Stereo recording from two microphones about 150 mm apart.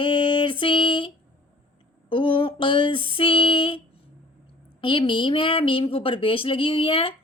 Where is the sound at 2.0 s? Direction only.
35° left (ahead or behind).